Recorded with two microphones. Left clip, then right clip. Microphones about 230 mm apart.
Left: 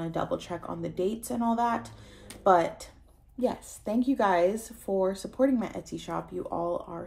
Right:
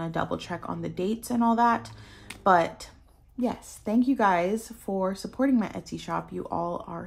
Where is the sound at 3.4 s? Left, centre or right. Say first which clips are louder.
Left 1 dB; right.